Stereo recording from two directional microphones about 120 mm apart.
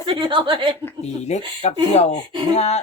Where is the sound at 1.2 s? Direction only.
65° left (ahead or behind).